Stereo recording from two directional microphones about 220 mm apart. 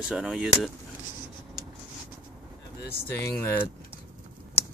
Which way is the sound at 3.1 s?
10° left (ahead or behind).